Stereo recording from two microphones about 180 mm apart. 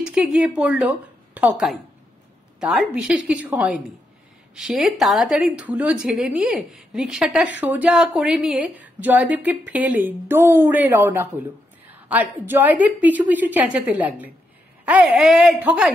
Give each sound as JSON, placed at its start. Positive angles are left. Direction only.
{"t": 0.0, "sound": "a sound", "side_deg": -5}
{"t": 0.6, "sound": "speech", "side_deg": -10}
{"t": 2.6, "sound": "a woman's voice", "side_deg": -5}